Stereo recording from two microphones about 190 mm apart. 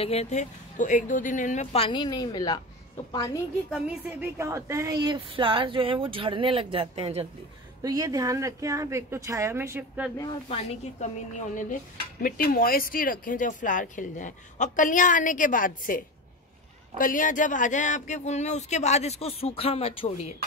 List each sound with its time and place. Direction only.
0.0 s speech: 30° left (ahead or behind)
3.7 s a woman's voice: 10° right (ahead or behind); by 7.2 s 30° right (ahead or behind)
7.8 s a woman's voice: 20° right (ahead or behind)
10.5 s speech: 35° left (ahead or behind)